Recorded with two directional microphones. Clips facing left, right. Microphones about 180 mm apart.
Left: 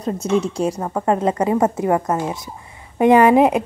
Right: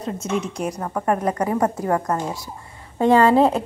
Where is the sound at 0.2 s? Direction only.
30° left (ahead or behind).